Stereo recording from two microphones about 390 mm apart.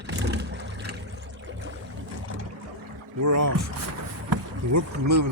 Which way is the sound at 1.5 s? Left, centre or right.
Right.